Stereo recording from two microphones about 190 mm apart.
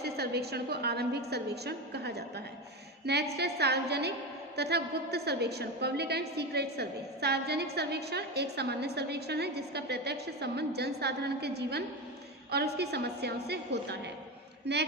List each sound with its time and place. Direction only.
0.0 s a woman's voice: 55° right (ahead or behind)